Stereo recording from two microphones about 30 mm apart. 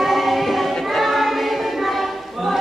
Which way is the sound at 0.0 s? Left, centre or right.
Centre.